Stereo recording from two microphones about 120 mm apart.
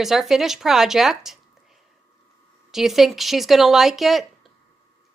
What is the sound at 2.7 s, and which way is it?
Speech, centre (ahead or behind).